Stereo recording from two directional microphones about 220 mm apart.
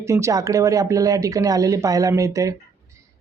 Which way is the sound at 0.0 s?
15° right (ahead or behind).